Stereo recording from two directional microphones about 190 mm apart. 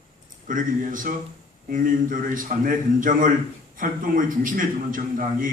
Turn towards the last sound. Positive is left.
turn(degrees=-45)  # may be behind; listen again after turning